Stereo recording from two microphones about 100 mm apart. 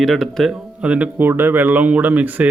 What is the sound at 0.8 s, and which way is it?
Speech, 15° right (ahead or behind).